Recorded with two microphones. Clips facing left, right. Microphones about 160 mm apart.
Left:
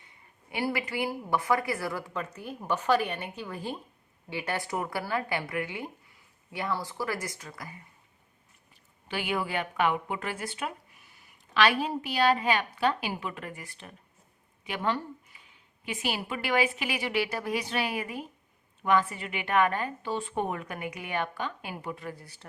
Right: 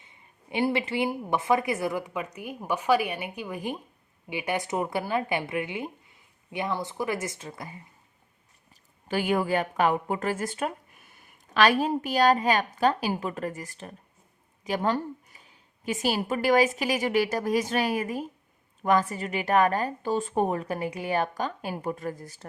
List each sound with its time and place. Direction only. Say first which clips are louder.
0.0 s speech: right 2 dB; 20° right (ahead or behind)
9.0 s a woman's voice: right 6 dB; 45° right (ahead or behind)